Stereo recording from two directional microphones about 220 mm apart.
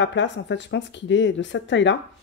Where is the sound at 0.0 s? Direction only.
55° left (ahead or behind).